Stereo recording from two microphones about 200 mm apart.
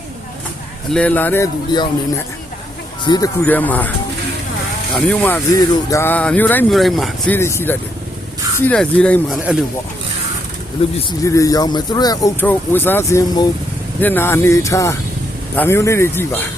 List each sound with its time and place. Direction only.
0.9 s speech: 5° left (ahead or behind)
3.0 s speech: 20° left (ahead or behind)
3.4 s speech: 10° left (ahead or behind)
4.9 s speech: 5° left (ahead or behind)
7.3 s speech: 10° left (ahead or behind)
9.4 s speech: 5° right (ahead or behind)
10.8 s speech: 30° left (ahead or behind)
11.2 s speech: 15° left (ahead or behind)